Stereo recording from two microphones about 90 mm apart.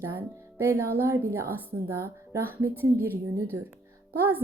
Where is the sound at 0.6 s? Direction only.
30° right (ahead or behind).